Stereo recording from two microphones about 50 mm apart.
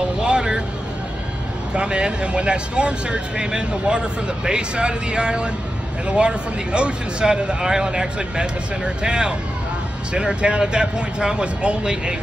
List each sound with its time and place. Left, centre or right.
0.2 s vehicle: centre
1.7 s speech: right